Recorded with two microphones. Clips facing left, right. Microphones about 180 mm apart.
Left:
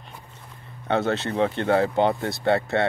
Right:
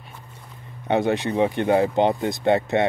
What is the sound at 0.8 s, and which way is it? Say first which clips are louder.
Speech: right 2 dB; 15° right (ahead or behind).